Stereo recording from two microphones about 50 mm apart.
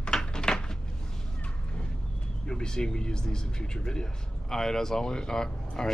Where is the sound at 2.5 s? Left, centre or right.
Centre.